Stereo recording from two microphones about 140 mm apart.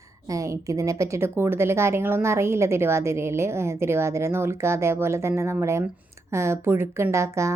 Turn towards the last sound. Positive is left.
turn(degrees=-20)  # may be behind; listen again after turning